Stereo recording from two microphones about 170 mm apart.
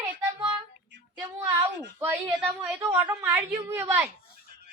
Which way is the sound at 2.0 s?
10° right (ahead or behind).